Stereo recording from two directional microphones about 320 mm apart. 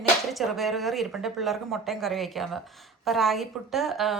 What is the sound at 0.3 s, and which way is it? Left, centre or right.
A woman's voice, centre.